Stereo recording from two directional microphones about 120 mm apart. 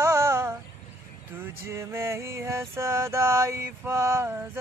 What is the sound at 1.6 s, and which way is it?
Music, 25° right (ahead or behind).